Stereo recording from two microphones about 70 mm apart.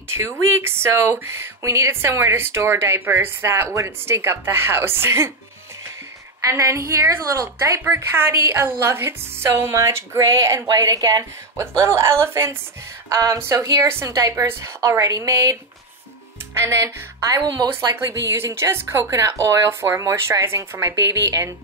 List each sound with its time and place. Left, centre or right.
0.6 s speech: right
6.5 s a woman's voice: right
10.7 s a woman's voice: right
11.5 s speech: right
13.1 s a woman's voice: right
13.4 s speech: right
14.0 s a woman's voice: right
14.8 s a woman's voice: right
16.5 s speech: right
17.3 s a woman's voice: right
17.6 s a woman's voice: right